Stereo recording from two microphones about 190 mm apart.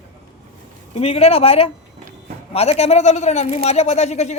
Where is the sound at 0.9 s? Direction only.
30° left (ahead or behind).